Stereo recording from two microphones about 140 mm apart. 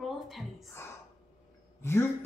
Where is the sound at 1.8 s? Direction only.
20° left (ahead or behind).